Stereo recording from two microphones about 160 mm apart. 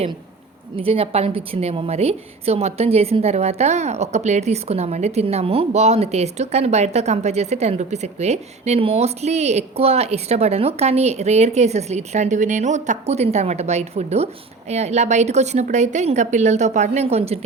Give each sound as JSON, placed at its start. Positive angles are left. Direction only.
{"t": 0.8, "sound": "a woman's voice", "side_deg": -35}